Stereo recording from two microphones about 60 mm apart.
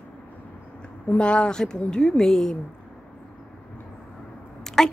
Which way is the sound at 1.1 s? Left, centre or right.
Centre.